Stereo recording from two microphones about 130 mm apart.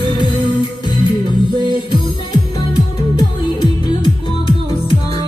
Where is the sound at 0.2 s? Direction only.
35° left (ahead or behind).